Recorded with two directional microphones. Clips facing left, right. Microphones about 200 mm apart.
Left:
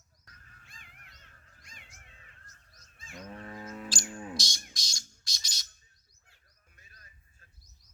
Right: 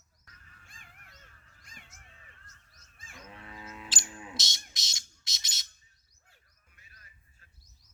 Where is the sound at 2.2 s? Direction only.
40° left (ahead or behind).